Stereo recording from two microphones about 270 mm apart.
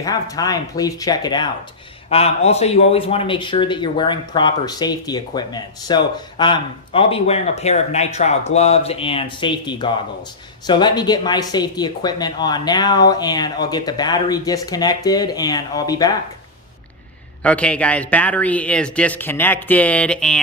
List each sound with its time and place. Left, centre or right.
0.0 s a man's voice: centre
17.4 s speech: centre